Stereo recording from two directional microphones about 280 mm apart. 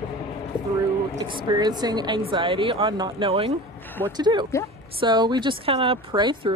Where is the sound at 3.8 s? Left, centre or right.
Centre.